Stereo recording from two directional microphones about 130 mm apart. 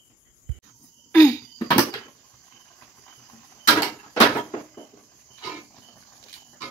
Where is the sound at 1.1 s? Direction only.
25° left (ahead or behind).